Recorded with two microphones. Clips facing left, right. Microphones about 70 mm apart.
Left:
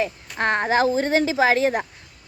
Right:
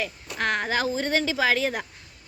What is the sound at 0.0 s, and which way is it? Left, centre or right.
Speech, left.